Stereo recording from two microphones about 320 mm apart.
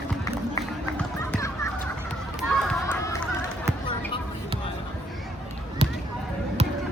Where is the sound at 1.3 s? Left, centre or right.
Centre.